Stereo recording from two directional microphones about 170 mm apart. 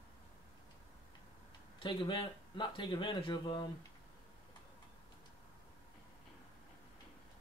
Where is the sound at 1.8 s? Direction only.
30° left (ahead or behind).